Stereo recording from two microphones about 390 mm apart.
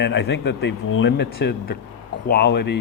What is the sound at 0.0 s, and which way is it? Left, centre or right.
Speech, left.